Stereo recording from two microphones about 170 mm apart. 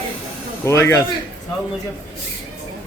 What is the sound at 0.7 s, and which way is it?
Speech, 15° left (ahead or behind).